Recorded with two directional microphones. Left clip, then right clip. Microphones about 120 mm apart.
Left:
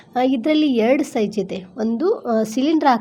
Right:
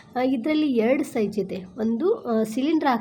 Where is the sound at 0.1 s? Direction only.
30° left (ahead or behind).